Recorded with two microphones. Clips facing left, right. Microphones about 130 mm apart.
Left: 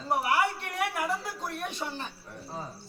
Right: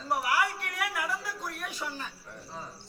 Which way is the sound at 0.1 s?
25° left (ahead or behind).